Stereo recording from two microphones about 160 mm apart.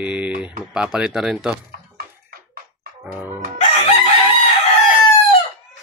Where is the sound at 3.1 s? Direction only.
10° right (ahead or behind).